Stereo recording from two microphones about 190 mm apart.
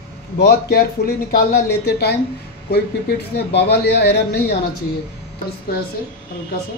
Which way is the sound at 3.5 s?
60° left (ahead or behind).